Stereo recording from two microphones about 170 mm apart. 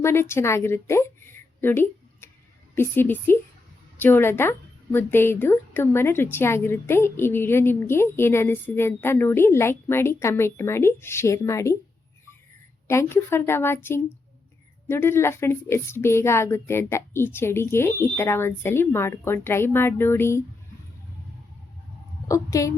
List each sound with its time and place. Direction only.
0.0 s a woman's voice: 15° left (ahead or behind)
12.9 s speech: 15° left (ahead or behind)
22.3 s a woman's voice: 20° left (ahead or behind)